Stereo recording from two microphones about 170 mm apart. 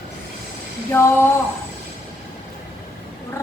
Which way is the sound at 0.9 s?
15° left (ahead or behind).